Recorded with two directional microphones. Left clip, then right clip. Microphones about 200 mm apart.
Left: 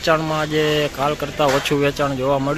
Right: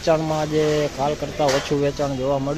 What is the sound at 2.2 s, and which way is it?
Speech, 15° left (ahead or behind).